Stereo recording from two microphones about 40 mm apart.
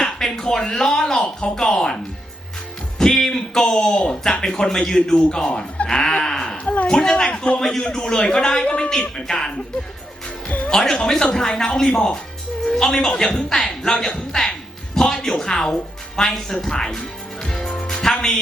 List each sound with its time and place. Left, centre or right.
0.0 s a sound: centre
1.4 s a man's voice: centre
3.0 s a man's voice: centre
5.9 s a sound: centre
6.8 s a man's voice: centre
7.6 s a man's voice: centre
8.6 s speech: left
8.9 s a man's voice: centre
10.7 s a man's voice: centre
13.7 s speech: left
14.9 s a man's voice: centre
17.4 s music: centre